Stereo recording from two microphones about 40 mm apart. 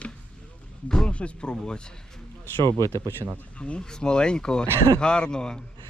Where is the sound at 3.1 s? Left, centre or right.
Right.